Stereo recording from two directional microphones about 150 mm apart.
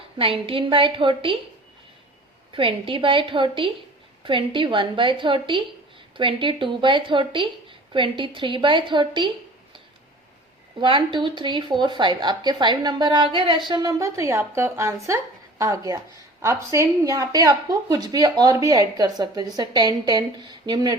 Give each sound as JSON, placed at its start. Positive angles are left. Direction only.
{"t": 0.2, "sound": "a woman's voice", "side_deg": -35}
{"t": 2.5, "sound": "a woman's voice", "side_deg": -35}
{"t": 10.8, "sound": "a woman's voice", "side_deg": -35}